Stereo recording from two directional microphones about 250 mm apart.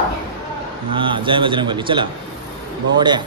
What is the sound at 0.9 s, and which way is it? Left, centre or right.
A man's voice, centre.